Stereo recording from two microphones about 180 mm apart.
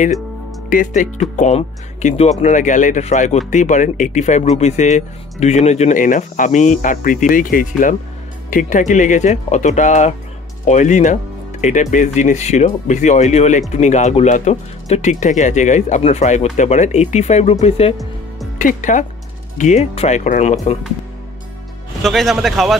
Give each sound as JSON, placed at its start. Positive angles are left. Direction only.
{"t": 0.7, "sound": "speech", "side_deg": 45}
{"t": 18.6, "sound": "speech", "side_deg": 45}
{"t": 22.0, "sound": "speech", "side_deg": 0}